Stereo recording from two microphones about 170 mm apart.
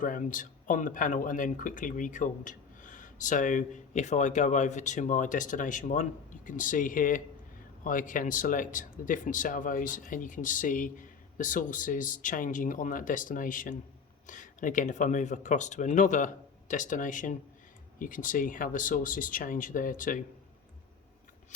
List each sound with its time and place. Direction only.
0.0 s speech: 50° left (ahead or behind)